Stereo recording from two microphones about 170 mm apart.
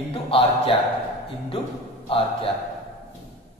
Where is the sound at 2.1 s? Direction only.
35° left (ahead or behind).